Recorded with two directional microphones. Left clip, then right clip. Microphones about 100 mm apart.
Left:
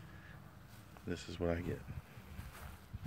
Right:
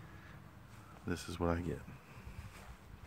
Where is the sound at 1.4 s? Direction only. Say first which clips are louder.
Right 1 dB; 30° right (ahead or behind).